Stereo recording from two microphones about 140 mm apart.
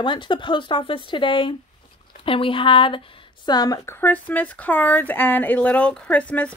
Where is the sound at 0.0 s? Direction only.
35° left (ahead or behind).